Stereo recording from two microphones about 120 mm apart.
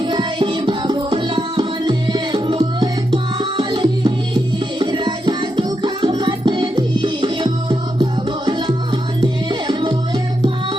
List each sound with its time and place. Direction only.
0.0 s music: 40° right (ahead or behind)
3.6 s tabla: 40° right (ahead or behind)
4.8 s music: 40° right (ahead or behind)